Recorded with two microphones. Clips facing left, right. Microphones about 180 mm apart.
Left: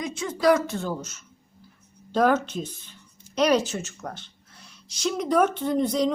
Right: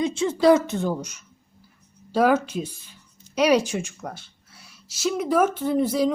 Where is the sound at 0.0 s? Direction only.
25° right (ahead or behind).